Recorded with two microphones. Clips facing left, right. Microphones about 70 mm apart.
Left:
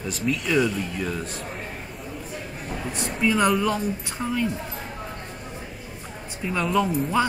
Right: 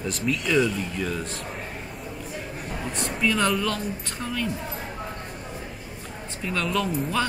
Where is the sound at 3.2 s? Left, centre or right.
Centre.